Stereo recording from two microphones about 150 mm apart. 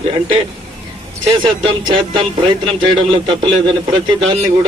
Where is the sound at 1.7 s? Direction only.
30° right (ahead or behind).